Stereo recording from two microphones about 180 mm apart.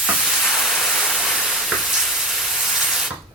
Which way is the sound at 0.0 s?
Centre (ahead or behind).